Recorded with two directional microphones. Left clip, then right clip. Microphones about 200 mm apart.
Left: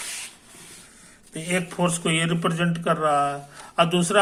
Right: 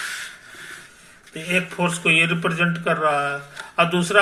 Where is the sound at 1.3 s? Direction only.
25° left (ahead or behind).